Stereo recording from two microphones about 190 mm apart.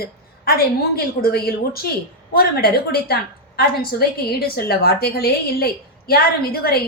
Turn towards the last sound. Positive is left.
turn(degrees=55)  # may be behind; listen again after turning